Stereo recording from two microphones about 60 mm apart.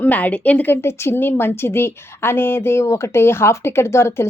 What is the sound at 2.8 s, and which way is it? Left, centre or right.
Speech, left.